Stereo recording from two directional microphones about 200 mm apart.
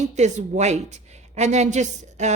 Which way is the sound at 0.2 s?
35° right (ahead or behind).